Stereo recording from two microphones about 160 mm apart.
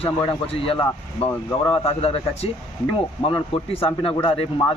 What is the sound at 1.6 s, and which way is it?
Speech, 35° left (ahead or behind).